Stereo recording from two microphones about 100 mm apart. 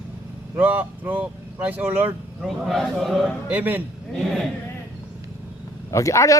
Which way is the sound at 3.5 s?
15° right (ahead or behind).